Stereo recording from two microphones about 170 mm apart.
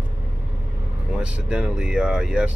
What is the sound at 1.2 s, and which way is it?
Speech, 5° right (ahead or behind).